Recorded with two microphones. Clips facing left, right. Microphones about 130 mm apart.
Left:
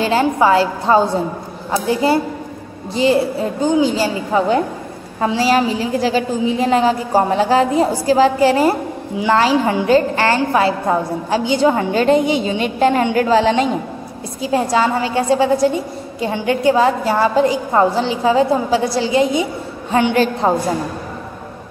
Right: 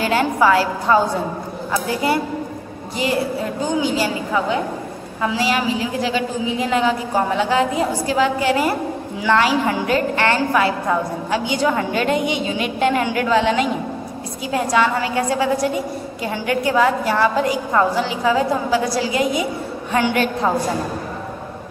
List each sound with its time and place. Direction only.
0.0 s a woman's voice: 25° left (ahead or behind)
3.8 s a woman's voice: 30° left (ahead or behind)